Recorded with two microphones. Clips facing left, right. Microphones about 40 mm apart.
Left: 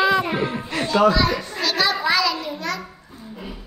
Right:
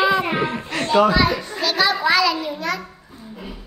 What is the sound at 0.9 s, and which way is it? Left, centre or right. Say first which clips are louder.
Speech: right 1 dB; right.